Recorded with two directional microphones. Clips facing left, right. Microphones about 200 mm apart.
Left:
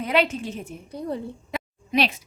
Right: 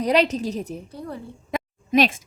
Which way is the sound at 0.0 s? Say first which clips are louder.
Right 3 dB; 40° right (ahead or behind).